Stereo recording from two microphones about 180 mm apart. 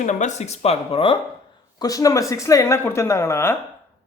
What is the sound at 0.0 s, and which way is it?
Speech, 40° left (ahead or behind).